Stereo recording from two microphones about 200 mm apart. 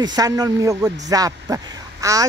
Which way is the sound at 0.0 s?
20° right (ahead or behind).